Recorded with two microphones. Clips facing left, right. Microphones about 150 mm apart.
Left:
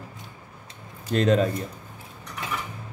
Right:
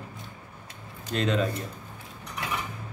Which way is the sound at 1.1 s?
40° left (ahead or behind).